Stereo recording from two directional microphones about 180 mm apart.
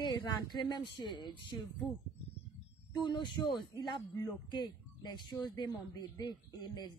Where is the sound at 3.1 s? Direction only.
25° left (ahead or behind).